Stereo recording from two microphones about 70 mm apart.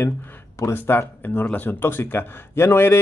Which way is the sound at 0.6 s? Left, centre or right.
Left.